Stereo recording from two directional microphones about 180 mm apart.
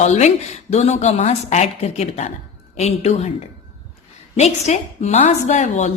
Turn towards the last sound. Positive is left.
turn(degrees=40)  # may be behind; listen again after turning